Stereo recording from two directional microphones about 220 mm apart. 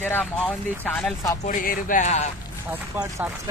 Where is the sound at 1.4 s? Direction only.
35° left (ahead or behind).